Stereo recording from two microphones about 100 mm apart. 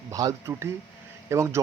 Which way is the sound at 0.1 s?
35° right (ahead or behind).